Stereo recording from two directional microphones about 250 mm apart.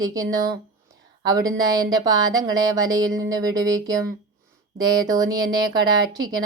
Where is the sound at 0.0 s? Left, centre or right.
Centre.